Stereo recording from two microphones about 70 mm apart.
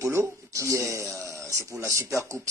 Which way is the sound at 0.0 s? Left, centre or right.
Right.